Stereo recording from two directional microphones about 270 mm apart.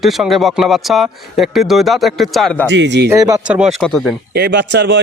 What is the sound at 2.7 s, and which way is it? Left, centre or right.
Speech, right.